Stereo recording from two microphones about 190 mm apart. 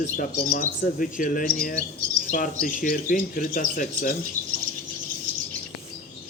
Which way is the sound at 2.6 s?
45° left (ahead or behind).